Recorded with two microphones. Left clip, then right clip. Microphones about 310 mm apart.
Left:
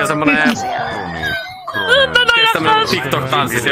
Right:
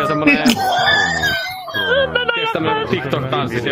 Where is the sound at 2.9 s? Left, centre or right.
Centre.